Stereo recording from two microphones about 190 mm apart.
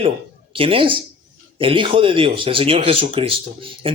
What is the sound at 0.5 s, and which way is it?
A man's voice, 30° right (ahead or behind).